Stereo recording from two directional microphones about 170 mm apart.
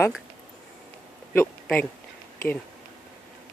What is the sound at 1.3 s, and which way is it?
Speech, 10° left (ahead or behind).